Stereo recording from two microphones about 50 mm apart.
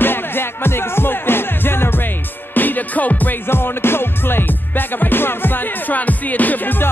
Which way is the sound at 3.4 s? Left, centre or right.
Left.